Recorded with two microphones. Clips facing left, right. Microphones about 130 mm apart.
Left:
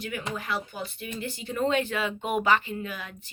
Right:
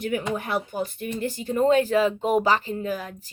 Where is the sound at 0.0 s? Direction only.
55° right (ahead or behind).